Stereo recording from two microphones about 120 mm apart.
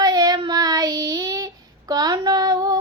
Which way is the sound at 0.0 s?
35° right (ahead or behind).